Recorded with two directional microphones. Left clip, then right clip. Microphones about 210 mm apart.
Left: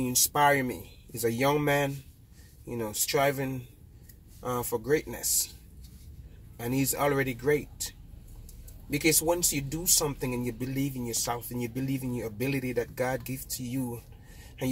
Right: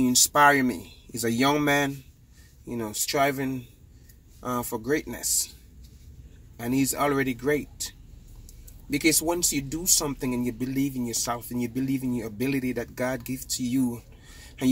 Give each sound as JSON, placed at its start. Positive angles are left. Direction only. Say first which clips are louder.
{"t": 0.0, "sound": "speech", "louder": "right 6 dB", "side_deg": -20}
{"t": 6.5, "sound": "speech", "louder": "right 4 dB", "side_deg": -20}
{"t": 8.9, "sound": "speech", "louder": "right 2 dB", "side_deg": -20}